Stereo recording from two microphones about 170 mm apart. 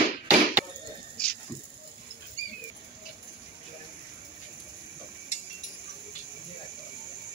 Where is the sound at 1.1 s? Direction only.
5° left (ahead or behind).